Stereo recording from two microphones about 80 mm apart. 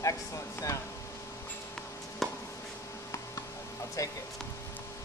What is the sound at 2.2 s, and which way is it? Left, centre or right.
Chop, centre.